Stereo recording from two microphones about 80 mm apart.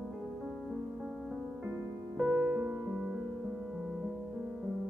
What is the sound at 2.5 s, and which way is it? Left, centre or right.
Music, centre.